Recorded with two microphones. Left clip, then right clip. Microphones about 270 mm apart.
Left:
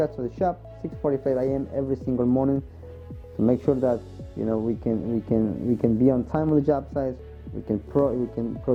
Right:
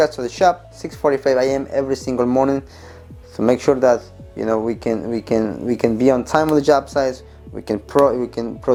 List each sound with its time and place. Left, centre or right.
0.0 s speech: centre